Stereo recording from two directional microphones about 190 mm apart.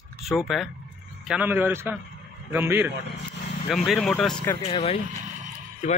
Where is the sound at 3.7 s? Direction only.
Centre (ahead or behind).